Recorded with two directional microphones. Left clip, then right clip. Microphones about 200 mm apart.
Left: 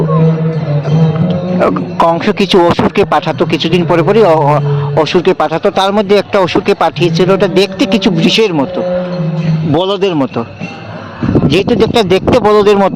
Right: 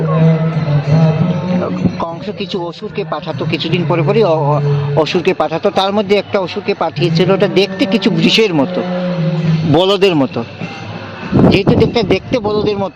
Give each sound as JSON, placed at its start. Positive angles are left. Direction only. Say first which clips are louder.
{"t": 1.6, "sound": "speech", "louder": "left 9 dB", "side_deg": 40}
{"t": 9.7, "sound": "speech", "louder": "right 1 dB", "side_deg": -5}
{"t": 11.5, "sound": "speech", "louder": "left 3 dB", "side_deg": 10}